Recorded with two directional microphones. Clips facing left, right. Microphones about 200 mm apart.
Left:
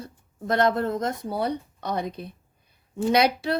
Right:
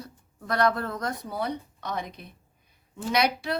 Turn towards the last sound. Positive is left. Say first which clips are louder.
# left 4 dB
turn(degrees=30)  # may be behind; listen again after turning